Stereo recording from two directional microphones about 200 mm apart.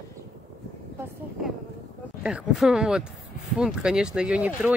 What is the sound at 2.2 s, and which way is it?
Speech, 5° right (ahead or behind).